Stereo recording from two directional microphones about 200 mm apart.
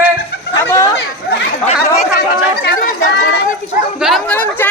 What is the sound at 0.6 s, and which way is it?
Chatter, 15° left (ahead or behind).